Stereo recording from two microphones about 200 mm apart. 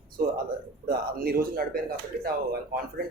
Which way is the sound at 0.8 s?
45° right (ahead or behind).